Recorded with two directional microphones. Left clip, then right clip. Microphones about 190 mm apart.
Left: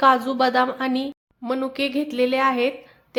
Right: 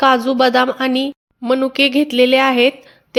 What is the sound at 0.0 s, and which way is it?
A woman's voice, 35° right (ahead or behind).